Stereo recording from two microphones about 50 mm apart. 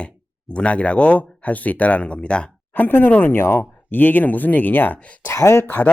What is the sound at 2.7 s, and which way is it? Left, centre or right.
Speech, left.